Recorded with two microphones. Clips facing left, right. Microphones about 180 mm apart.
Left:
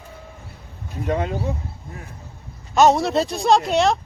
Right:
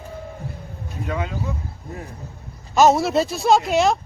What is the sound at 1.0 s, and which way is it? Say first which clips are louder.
Speech: left 4 dB; 35° left (ahead or behind).